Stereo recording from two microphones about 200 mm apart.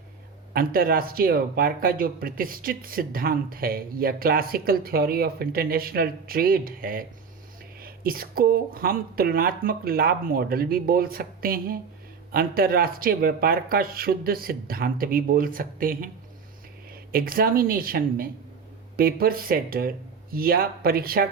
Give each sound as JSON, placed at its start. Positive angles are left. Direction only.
{"t": 0.5, "sound": "speech", "side_deg": -45}